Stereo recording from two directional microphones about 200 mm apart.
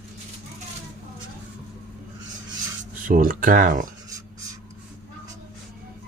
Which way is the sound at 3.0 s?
45° right (ahead or behind).